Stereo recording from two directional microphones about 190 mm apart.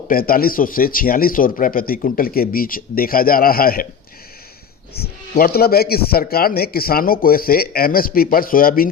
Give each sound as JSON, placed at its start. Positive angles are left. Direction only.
{"t": 0.1, "sound": "speech", "side_deg": 50}
{"t": 4.9, "sound": "speech", "side_deg": 50}